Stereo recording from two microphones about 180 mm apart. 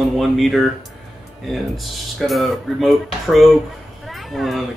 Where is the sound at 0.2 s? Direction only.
Centre (ahead or behind).